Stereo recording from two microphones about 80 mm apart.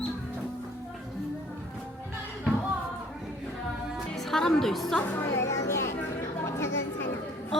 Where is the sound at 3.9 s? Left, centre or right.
Centre.